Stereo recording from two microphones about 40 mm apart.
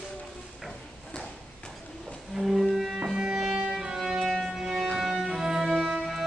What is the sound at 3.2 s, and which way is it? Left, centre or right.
Music, centre.